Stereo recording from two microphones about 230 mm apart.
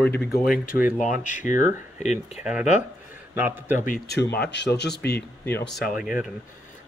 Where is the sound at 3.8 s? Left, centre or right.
Left.